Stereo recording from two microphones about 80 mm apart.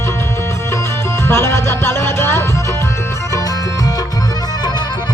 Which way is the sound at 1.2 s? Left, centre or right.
Left.